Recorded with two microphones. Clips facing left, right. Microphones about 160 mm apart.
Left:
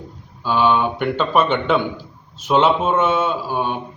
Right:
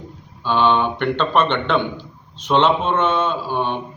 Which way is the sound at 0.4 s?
5° left (ahead or behind).